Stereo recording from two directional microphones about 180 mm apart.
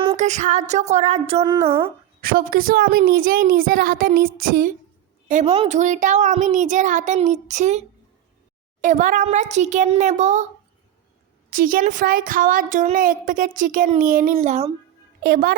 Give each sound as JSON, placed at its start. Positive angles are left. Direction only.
{"t": 0.2, "sound": "a child's voice", "side_deg": -40}
{"t": 1.4, "sound": "a woman's voice", "side_deg": -20}
{"t": 2.2, "sound": "speech", "side_deg": -55}
{"t": 5.3, "sound": "a child's voice", "side_deg": -40}
{"t": 11.5, "sound": "speech", "side_deg": -50}
{"t": 15.2, "sound": "a child's voice", "side_deg": -60}